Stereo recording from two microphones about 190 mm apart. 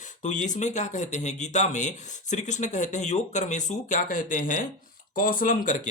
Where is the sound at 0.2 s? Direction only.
40° left (ahead or behind).